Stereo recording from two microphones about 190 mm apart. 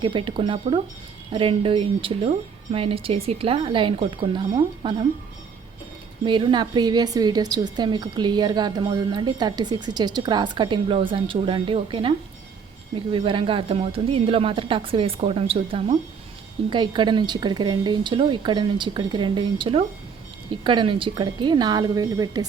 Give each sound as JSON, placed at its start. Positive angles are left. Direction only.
{"t": 0.0, "sound": "a woman's voice", "side_deg": -25}
{"t": 6.2, "sound": "a woman's voice", "side_deg": -25}